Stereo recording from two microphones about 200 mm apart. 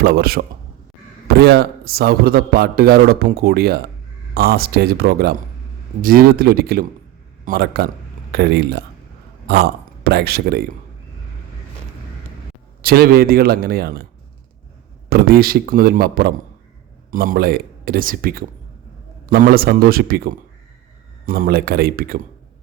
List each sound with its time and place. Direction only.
0.0 s a man's voice: 50° right (ahead or behind)
12.8 s a man's voice: 50° right (ahead or behind)
15.1 s a man's voice: 50° right (ahead or behind)